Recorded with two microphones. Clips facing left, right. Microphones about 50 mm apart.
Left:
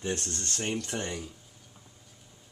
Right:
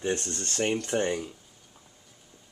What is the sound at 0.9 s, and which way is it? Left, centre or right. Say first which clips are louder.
Speech: right 7 dB; right.